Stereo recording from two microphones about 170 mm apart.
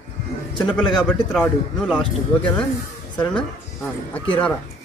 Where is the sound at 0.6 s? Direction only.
5° left (ahead or behind).